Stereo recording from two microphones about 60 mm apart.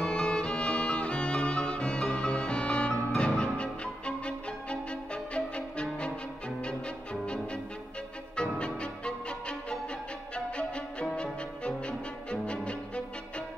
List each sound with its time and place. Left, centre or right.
0.0 s music: centre
10.3 s violin: centre
11.1 s music: centre